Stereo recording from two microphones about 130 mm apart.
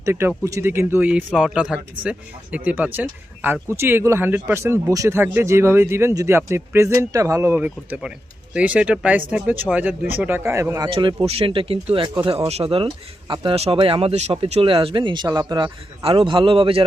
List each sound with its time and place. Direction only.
0.0 s speech: 20° right (ahead or behind)
10.8 s speech: 40° right (ahead or behind)
12.0 s speech: 35° right (ahead or behind)
12.3 s speech: 55° right (ahead or behind)